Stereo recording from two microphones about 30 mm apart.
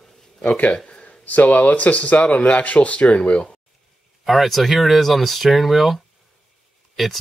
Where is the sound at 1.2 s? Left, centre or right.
Left.